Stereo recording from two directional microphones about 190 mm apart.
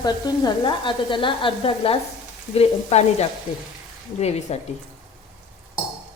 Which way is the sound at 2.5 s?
35° left (ahead or behind).